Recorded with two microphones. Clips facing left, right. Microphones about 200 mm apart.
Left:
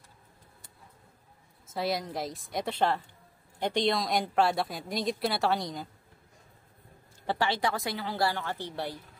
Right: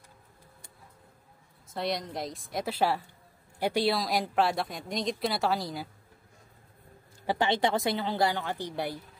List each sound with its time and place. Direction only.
1.7 s a woman's voice: 5° left (ahead or behind)
7.2 s speech: 20° right (ahead or behind)